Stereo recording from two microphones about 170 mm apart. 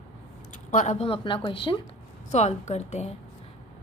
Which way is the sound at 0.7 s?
45° left (ahead or behind).